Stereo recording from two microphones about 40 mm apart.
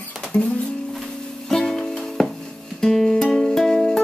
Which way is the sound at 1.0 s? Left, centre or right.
Centre.